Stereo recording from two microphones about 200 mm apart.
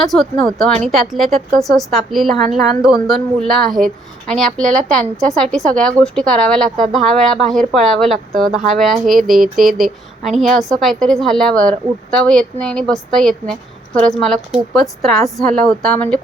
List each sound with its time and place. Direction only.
0.0 s a woman's voice: centre (ahead or behind)